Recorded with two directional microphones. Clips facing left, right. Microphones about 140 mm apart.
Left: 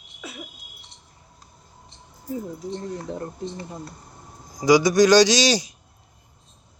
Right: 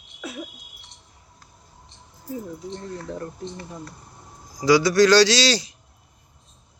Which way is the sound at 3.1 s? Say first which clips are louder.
Left 1 dB; 30° left (ahead or behind).